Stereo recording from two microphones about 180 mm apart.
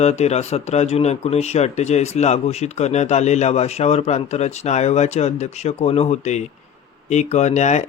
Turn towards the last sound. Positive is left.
turn(degrees=40)  # may be behind; listen again after turning